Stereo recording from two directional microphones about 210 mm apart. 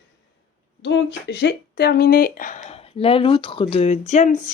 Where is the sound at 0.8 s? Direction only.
60° left (ahead or behind).